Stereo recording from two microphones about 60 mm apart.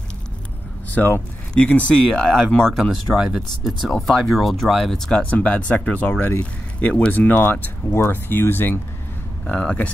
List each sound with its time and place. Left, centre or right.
0.9 s speech: left
2.2 s speech: centre
2.8 s speech: centre
5.2 s speech: left
9.5 s speech: left